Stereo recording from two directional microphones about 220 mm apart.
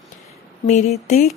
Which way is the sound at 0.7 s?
30° left (ahead or behind).